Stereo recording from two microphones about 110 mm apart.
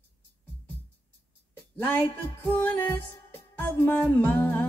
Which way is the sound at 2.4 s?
20° left (ahead or behind).